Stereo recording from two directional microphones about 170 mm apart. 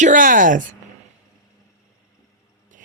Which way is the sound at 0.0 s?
50° right (ahead or behind).